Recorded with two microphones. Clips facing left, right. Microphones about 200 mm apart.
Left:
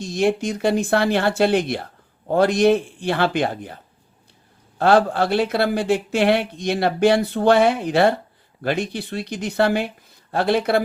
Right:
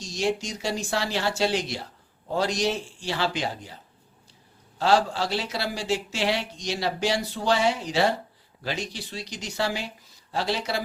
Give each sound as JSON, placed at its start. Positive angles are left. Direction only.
{"t": 0.0, "sound": "speech", "side_deg": 55}
{"t": 4.8, "sound": "speech", "side_deg": 55}